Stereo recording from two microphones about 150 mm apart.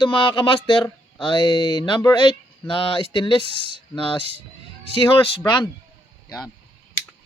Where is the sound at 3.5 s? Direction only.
40° right (ahead or behind).